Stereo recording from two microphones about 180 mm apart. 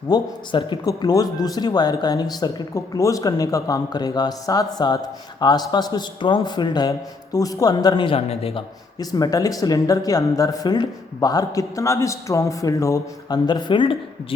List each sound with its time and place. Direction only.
0.1 s a man's voice: 25° left (ahead or behind)
9.0 s speech: 20° left (ahead or behind)